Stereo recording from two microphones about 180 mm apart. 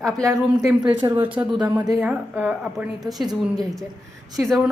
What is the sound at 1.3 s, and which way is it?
Speech, 10° right (ahead or behind).